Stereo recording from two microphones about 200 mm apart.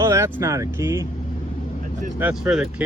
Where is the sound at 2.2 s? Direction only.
5° right (ahead or behind).